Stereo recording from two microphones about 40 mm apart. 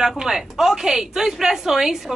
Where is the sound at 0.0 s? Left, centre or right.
Centre.